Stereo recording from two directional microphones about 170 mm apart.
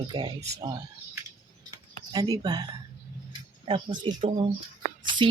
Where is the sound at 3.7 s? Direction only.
30° right (ahead or behind).